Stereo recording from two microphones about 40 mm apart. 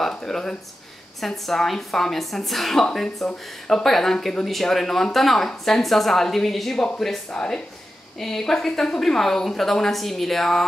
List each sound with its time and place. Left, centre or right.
0.0 s speech: centre
1.2 s a woman's voice: centre
7.2 s speech: left
8.2 s speech: centre